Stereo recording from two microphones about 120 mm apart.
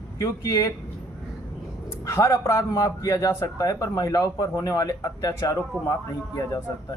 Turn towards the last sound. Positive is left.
turn(degrees=30)  # may be behind; listen again after turning